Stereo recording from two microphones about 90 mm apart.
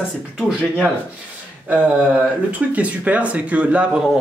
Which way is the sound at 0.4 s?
10° right (ahead or behind).